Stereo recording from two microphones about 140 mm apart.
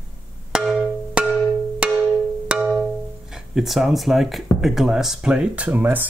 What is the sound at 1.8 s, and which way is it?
Percussion, 10° right (ahead or behind).